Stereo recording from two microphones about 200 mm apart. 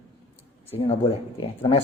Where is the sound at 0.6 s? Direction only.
30° left (ahead or behind).